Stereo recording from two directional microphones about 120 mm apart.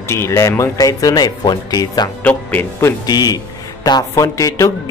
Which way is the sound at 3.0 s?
35° left (ahead or behind).